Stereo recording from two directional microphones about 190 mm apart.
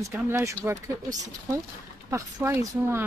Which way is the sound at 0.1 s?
15° right (ahead or behind).